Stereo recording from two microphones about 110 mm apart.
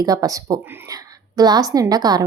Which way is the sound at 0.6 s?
20° right (ahead or behind).